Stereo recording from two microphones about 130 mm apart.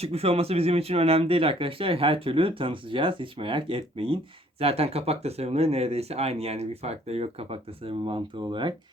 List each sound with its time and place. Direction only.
0.0 s speech: 50° right (ahead or behind)